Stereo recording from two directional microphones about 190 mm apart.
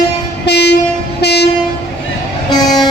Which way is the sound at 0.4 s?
60° left (ahead or behind).